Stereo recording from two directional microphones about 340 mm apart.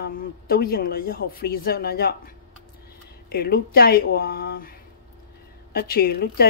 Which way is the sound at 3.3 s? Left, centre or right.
Left.